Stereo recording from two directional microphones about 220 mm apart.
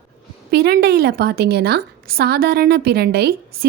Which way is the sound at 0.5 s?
45° right (ahead or behind).